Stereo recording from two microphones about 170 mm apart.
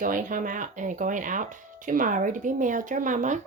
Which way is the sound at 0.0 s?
50° right (ahead or behind).